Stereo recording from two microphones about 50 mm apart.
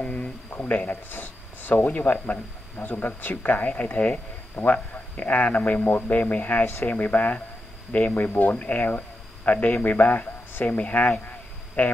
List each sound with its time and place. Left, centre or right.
0.0 s speech: left
1.9 s speech: left
2.8 s speech: left
6.6 s speech: left
6.9 s speech: left
8.3 s speech: left
8.5 s a man's voice: left